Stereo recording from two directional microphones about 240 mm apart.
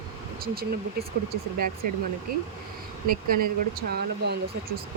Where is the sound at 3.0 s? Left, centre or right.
Right.